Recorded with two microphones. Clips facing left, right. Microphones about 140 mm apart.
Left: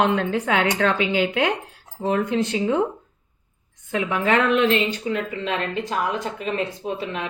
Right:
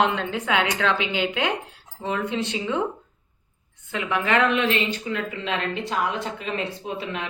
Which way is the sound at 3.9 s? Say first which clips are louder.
Left 2 dB; 50° left (ahead or behind).